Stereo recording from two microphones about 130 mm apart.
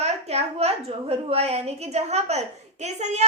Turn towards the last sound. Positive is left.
turn(degrees=-60)  # may be behind; listen again after turning